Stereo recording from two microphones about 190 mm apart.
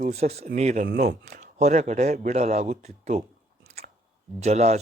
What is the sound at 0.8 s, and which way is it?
Speech, 50° right (ahead or behind).